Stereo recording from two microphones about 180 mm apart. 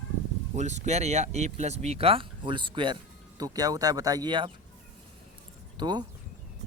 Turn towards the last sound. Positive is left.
turn(degrees=-25)  # may be behind; listen again after turning